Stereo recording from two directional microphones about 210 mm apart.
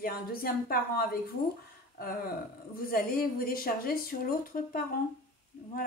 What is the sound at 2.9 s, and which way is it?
Speech, 45° left (ahead or behind).